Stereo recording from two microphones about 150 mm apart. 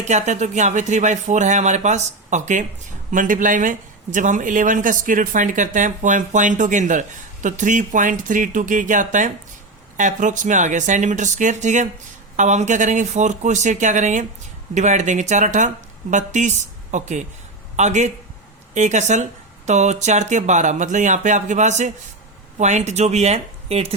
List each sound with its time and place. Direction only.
0.0 s speech: 50° right (ahead or behind)